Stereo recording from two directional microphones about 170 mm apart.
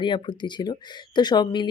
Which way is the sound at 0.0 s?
25° left (ahead or behind).